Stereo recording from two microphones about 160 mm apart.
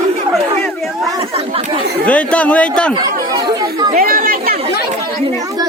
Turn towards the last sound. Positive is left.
turn(degrees=-65)  # may be behind; listen again after turning